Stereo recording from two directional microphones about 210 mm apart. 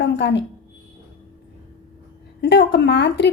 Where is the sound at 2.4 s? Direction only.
55° left (ahead or behind).